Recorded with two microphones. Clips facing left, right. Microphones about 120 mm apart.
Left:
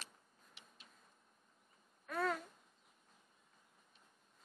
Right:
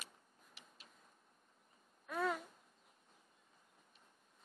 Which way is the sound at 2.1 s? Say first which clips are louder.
Even; 5° right (ahead or behind).